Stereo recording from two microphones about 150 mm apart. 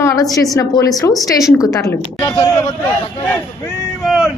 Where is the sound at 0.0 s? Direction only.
20° left (ahead or behind).